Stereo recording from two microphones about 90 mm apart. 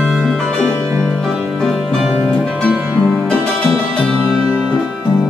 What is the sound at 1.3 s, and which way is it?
Music, 5° right (ahead or behind).